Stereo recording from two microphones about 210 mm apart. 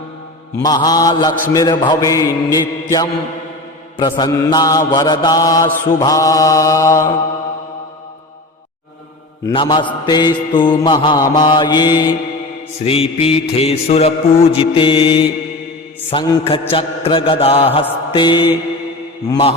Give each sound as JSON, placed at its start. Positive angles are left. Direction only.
{"t": 0.6, "sound": "mantra", "side_deg": 20}
{"t": 4.2, "sound": "mantra", "side_deg": 20}
{"t": 9.5, "sound": "mantra", "side_deg": 20}